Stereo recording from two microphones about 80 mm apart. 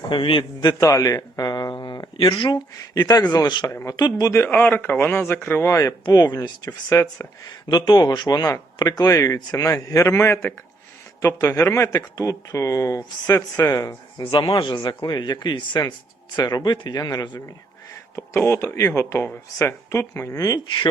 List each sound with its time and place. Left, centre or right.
0.1 s a man's voice: left
0.9 s speech: left
3.7 s speech: left
3.9 s speech: left
4.4 s a man's voice: left
6.7 s speech: left
7.7 s speech: left
14.3 s speech: left
16.3 s speech: left
18.4 s speech: left